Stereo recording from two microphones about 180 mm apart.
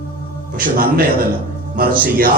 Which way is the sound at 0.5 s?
50° right (ahead or behind).